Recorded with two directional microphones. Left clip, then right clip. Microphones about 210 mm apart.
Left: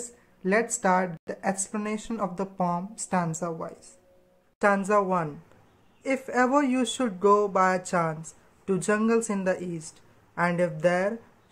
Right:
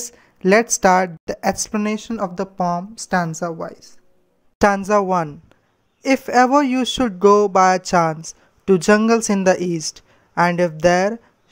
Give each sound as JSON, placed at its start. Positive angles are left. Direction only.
{"t": 0.4, "sound": "a woman's voice", "side_deg": -45}
{"t": 4.6, "sound": "speech", "side_deg": -45}